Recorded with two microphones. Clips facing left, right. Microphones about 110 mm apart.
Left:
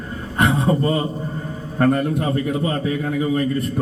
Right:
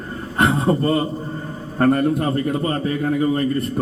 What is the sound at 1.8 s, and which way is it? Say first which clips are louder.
A man's voice: right 1 dB; centre (ahead or behind).